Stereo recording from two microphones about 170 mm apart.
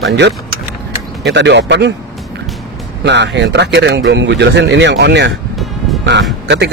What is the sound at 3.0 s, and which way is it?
Speech, 90° right.